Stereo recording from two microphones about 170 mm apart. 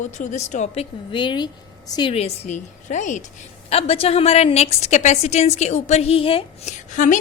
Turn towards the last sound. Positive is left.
turn(degrees=45)  # may be behind; listen again after turning